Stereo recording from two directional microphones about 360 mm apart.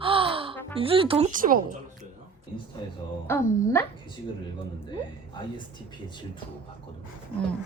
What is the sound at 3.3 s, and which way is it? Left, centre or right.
Speech, centre.